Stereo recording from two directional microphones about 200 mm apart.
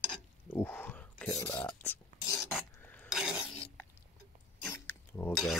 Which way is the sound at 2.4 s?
10° left (ahead or behind).